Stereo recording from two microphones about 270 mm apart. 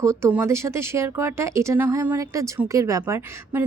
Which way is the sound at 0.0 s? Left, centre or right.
Centre.